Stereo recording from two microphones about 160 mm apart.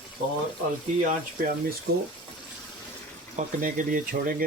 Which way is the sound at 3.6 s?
55° right (ahead or behind).